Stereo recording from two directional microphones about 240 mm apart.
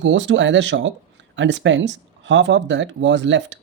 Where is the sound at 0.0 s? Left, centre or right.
Right.